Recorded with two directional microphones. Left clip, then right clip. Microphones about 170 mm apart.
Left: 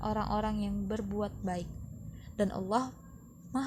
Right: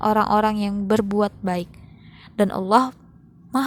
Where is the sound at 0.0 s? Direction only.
50° right (ahead or behind).